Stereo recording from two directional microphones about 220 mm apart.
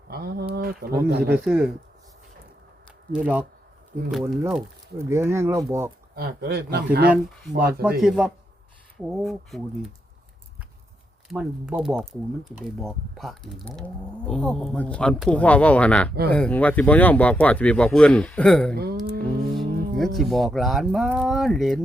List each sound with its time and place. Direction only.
0.1 s pigeon: 45° right (ahead or behind)
0.5 s speech: 45° right (ahead or behind)
1.5 s speech: 5° right (ahead or behind)
3.1 s speech: 5° right (ahead or behind)
4.9 s speech: 10° right (ahead or behind)
6.1 s speech: 45° right (ahead or behind)
7.1 s speech: centre (ahead or behind)
11.3 s speech: 5° right (ahead or behind)
18.8 s speech: 45° right (ahead or behind)
20.0 s speech: centre (ahead or behind)